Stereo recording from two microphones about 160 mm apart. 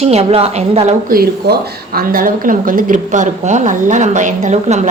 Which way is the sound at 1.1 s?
70° right (ahead or behind).